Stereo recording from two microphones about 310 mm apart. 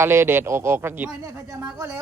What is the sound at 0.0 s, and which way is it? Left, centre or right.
A man's voice, centre.